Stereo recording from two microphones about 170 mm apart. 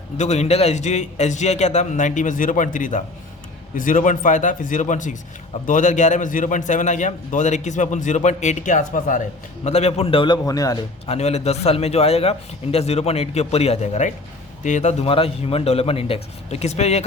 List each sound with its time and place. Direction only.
0.2 s a man's voice: 40° left (ahead or behind); by 10.8 s 20° left (ahead or behind)
11.0 s a man's voice: 40° left (ahead or behind)